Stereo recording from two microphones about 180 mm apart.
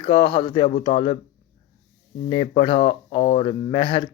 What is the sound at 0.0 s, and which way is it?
Speech, 25° left (ahead or behind).